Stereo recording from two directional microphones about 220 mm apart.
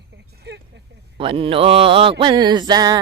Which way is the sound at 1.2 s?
25° right (ahead or behind).